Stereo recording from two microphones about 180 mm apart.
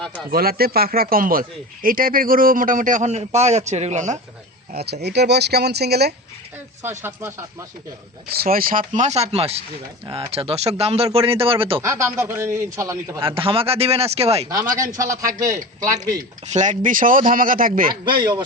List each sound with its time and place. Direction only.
0.3 s speech: 55° right (ahead or behind); by 4.2 s 40° right (ahead or behind)
4.7 s speech: 60° right (ahead or behind)
7.0 s a man's voice: 15° right (ahead or behind)
8.3 s speech: 55° right (ahead or behind)
8.9 s speech: 40° right (ahead or behind)
11.8 s a man's voice: 15° right (ahead or behind)
13.2 s speech: 30° right (ahead or behind)
14.8 s a man's voice: 15° right (ahead or behind)
16.5 s speech: 45° right (ahead or behind)
18.0 s speech: 25° right (ahead or behind)